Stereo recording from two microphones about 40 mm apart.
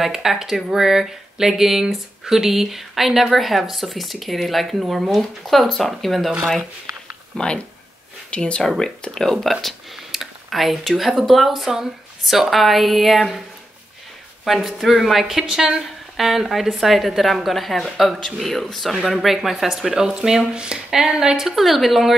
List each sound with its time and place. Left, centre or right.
0.0 s speech: centre
7.3 s speech: left
8.6 s speech: centre
9.4 s speech: centre
14.4 s speech: centre
15.5 s speech: centre
16.2 s speech: centre